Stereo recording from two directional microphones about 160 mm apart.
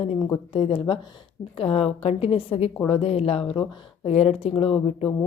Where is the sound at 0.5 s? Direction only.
35° left (ahead or behind).